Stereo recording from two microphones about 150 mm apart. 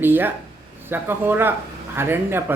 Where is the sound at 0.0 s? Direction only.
15° right (ahead or behind).